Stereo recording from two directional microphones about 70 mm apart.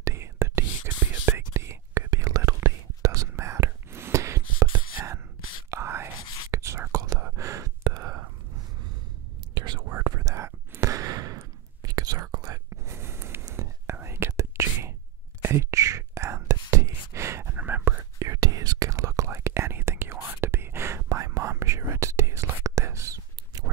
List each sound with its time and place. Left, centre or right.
0.0 s whispering: right
2.0 s whispering: right
7.3 s gasp: right
9.5 s whispering: right
9.8 s whispering: right
10.0 s whispering: right
12.6 s whispering: right
17.6 s whispering: right
18.2 s whispering: right